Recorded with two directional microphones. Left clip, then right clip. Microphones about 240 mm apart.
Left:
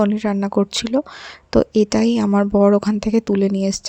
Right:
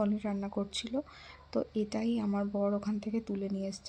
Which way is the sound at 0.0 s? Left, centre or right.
Left.